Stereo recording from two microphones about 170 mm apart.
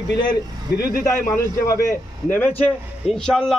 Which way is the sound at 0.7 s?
65° left (ahead or behind).